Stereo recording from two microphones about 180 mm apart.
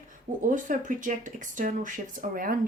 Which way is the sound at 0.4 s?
45° right (ahead or behind).